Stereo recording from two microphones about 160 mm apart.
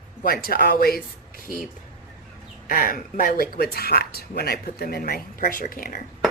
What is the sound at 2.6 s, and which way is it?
Speech, 60° left (ahead or behind).